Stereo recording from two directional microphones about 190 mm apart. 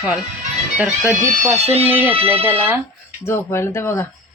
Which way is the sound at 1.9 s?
10° right (ahead or behind).